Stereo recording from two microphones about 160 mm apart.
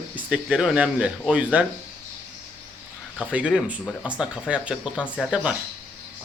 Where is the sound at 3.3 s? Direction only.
5° right (ahead or behind).